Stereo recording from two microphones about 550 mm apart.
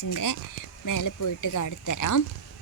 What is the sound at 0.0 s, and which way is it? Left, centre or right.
Speech, left.